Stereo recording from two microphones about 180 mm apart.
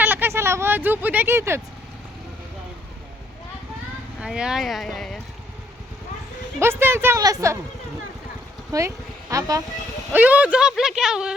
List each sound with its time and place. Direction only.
0.0 s speech: 10° right (ahead or behind)
4.2 s speech: 5° right (ahead or behind)
6.6 s a woman's voice: 15° right (ahead or behind)
8.7 s speech: 20° right (ahead or behind)
10.1 s speech: 10° right (ahead or behind)